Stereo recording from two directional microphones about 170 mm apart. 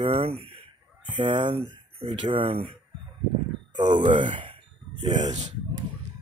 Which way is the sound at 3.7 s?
25° right (ahead or behind).